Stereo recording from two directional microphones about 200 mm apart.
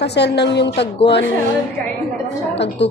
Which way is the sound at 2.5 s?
60° left (ahead or behind).